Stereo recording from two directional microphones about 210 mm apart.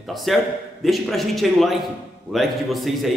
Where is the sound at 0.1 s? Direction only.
Centre (ahead or behind).